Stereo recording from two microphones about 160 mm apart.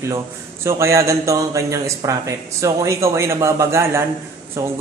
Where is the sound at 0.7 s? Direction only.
20° right (ahead or behind).